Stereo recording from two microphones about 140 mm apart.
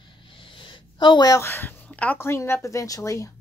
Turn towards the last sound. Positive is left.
turn(degrees=20)  # may be behind; listen again after turning